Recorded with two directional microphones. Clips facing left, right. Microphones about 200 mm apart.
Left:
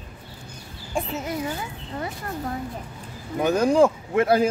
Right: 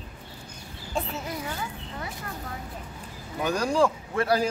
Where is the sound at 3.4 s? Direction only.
20° left (ahead or behind).